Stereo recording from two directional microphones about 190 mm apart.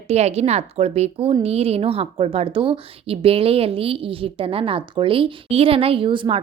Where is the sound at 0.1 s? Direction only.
35° right (ahead or behind).